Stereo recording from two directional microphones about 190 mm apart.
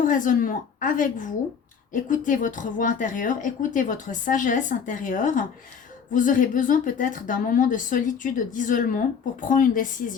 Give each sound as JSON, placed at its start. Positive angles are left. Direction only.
{"t": 0.0, "sound": "a woman's voice", "side_deg": 45}